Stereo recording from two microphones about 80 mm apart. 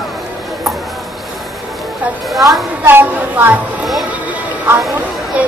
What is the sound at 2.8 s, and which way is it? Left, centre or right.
Speech, right.